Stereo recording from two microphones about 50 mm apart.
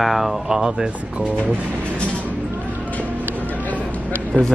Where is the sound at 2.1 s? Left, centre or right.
Right.